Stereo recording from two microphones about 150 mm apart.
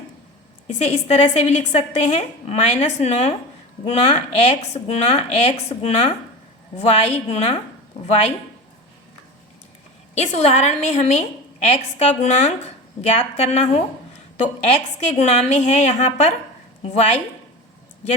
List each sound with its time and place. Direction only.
0.7 s a woman's voice: 50° left (ahead or behind)
10.2 s a woman's voice: 45° left (ahead or behind)